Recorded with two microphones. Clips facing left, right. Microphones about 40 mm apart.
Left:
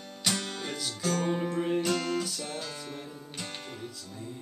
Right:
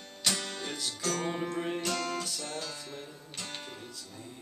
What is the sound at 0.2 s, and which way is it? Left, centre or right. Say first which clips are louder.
Music: left 1 dB; centre.